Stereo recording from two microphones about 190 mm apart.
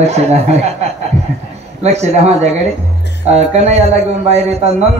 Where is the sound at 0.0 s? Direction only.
35° right (ahead or behind).